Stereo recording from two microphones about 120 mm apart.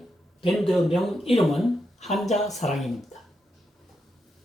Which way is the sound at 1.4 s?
Centre (ahead or behind).